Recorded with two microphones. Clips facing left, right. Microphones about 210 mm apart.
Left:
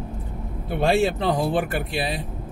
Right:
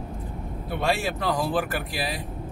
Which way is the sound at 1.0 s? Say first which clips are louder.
Left 5 dB; 25° left (ahead or behind).